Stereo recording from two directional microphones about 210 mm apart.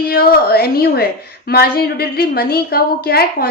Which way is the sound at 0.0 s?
45° left (ahead or behind).